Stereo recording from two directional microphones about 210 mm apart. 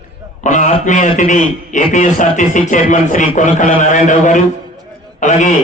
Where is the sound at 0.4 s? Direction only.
35° left (ahead or behind).